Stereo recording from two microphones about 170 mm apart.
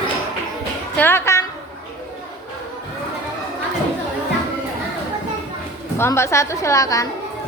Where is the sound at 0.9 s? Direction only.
10° left (ahead or behind).